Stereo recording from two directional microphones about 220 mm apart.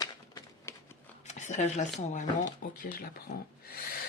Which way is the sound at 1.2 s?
30° left (ahead or behind).